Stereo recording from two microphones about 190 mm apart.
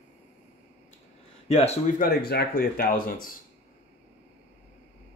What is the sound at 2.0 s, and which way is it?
Speech, 55° left (ahead or behind).